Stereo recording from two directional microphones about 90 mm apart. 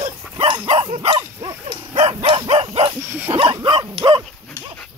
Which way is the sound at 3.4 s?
75° right (ahead or behind).